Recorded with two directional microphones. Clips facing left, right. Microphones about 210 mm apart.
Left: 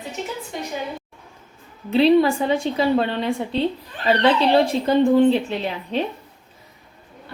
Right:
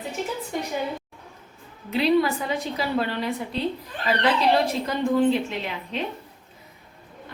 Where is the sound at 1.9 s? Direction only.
30° left (ahead or behind).